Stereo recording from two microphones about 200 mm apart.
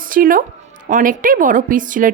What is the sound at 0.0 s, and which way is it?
A woman's voice, 45° right (ahead or behind).